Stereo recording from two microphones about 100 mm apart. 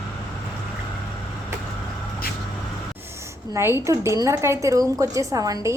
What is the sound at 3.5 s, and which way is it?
Speech, 25° right (ahead or behind).